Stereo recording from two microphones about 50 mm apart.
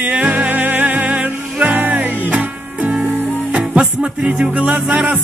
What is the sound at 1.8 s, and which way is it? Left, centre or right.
Music, right.